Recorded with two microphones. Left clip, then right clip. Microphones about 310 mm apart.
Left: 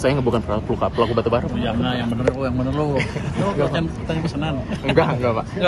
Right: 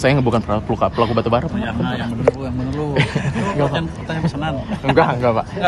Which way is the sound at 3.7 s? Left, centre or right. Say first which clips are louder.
Right 1 dB; centre.